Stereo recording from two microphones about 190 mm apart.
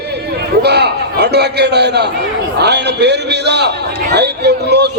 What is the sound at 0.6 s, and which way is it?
A man's voice, 60° right (ahead or behind).